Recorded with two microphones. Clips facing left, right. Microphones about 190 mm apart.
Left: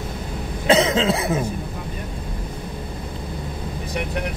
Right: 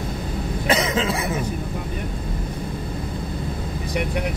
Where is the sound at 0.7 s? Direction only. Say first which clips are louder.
Left 5 dB; 25° left (ahead or behind).